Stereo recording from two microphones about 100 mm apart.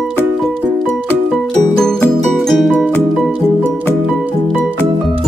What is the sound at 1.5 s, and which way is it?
Music, 5° left (ahead or behind).